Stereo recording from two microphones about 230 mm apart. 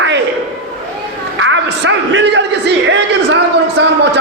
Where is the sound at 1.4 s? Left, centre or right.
Right.